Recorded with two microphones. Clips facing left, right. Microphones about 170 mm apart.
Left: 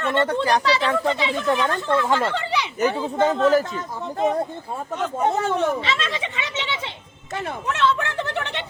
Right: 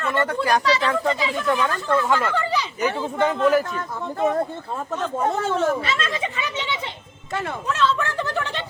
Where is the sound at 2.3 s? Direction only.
70° left (ahead or behind).